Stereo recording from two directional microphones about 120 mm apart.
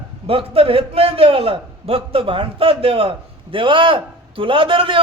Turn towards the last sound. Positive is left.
turn(degrees=-45)  # may be behind; listen again after turning